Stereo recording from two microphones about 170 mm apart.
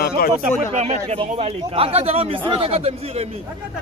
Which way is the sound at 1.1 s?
35° right (ahead or behind).